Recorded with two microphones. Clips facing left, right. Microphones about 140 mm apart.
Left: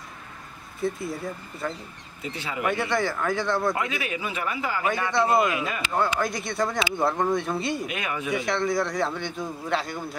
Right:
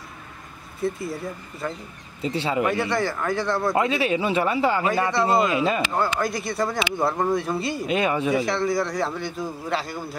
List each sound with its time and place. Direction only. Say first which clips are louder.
0.8 s a man's voice: right 1 dB; centre (ahead or behind)
2.2 s speech: right 6 dB; 30° right (ahead or behind)
2.7 s a man's voice: right 2 dB; centre (ahead or behind)
3.7 s speech: right 8 dB; 30° right (ahead or behind)
5.9 s a man's voice: right 1 dB; centre (ahead or behind)
7.8 s speech: right 8 dB; 30° right (ahead or behind)
8.4 s a man's voice: right 2 dB; centre (ahead or behind)